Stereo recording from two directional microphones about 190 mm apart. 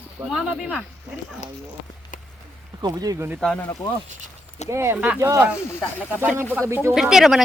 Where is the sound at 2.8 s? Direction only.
20° right (ahead or behind).